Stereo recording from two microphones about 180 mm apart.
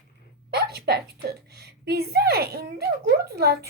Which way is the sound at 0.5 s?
60° right (ahead or behind).